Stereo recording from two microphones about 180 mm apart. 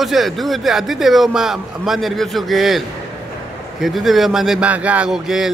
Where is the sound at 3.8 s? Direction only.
Centre (ahead or behind).